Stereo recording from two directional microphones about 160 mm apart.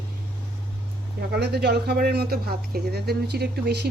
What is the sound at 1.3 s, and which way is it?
Speech, 90° right.